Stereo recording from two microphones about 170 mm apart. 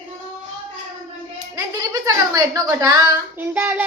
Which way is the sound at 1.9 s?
20° right (ahead or behind).